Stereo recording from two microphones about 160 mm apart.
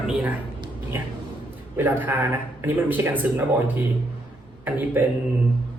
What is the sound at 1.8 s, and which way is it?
A man's voice, 10° right (ahead or behind).